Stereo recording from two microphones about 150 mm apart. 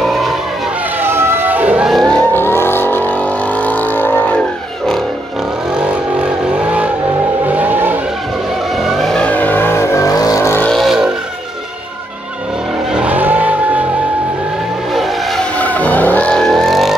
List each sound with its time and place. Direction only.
1.0 s vehicle: 15° right (ahead or behind); by 4.4 s 15° left (ahead or behind)
6.6 s vehicle: 10° right (ahead or behind)
8.8 s vehicle: centre (ahead or behind); by 10.7 s 15° left (ahead or behind)
10.7 s vehicle: centre (ahead or behind)
12.9 s vehicle: 10° right (ahead or behind)
15.0 s vehicle: 5° left (ahead or behind)